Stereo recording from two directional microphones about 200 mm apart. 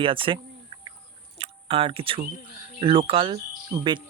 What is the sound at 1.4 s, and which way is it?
Speech, 25° right (ahead or behind).